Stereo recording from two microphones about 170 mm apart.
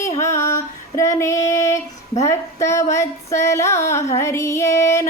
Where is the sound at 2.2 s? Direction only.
15° left (ahead or behind).